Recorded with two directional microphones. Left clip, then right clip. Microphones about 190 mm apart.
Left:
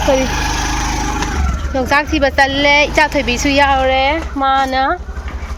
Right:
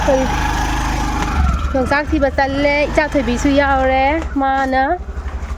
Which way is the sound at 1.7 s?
10° right (ahead or behind).